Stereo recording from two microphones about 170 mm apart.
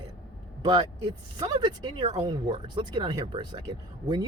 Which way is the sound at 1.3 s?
25° right (ahead or behind).